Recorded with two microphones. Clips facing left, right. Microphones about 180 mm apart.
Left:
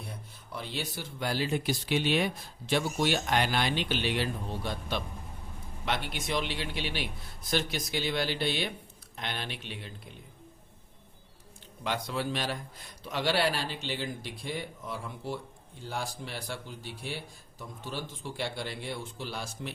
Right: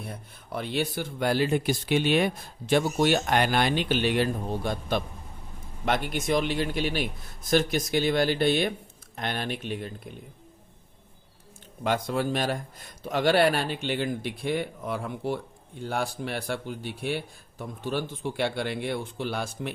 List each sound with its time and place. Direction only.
0.1 s speech: 60° right (ahead or behind)
11.8 s speech: 50° right (ahead or behind)